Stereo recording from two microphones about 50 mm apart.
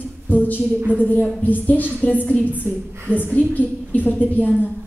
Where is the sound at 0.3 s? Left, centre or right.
Left.